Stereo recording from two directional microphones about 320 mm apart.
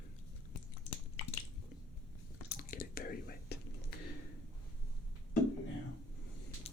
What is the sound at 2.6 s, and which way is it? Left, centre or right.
Whispering, left.